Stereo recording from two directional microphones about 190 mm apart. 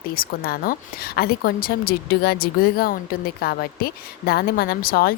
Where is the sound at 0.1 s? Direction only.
50° left (ahead or behind).